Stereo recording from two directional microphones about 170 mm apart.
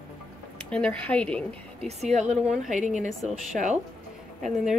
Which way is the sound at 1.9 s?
40° right (ahead or behind).